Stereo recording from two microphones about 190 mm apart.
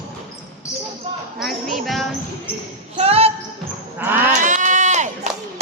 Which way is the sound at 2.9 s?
30° right (ahead or behind).